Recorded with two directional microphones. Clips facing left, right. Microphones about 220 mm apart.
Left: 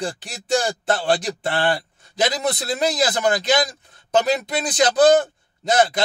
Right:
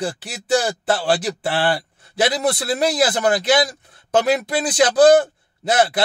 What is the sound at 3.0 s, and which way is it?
Speech, 5° right (ahead or behind).